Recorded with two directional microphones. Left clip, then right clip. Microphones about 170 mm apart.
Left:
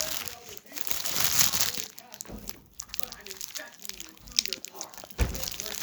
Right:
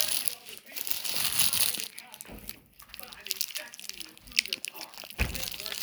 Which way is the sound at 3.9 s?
15° left (ahead or behind).